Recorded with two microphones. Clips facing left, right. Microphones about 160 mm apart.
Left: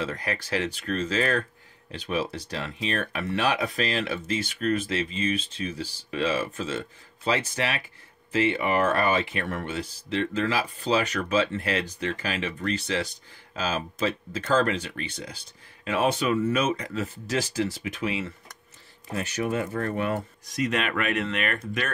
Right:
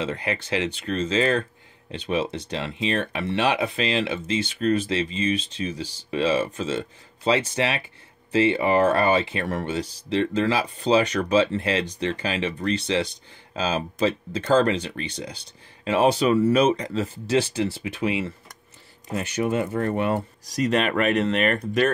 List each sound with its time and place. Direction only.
0.0 s speech: 25° right (ahead or behind)
19.3 s speech: 25° right (ahead or behind)